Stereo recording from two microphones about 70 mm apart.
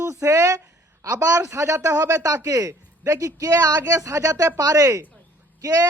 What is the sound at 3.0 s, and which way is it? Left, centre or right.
Speech, right.